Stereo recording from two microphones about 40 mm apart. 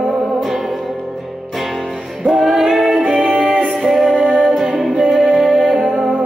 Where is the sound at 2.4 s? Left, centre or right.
Centre.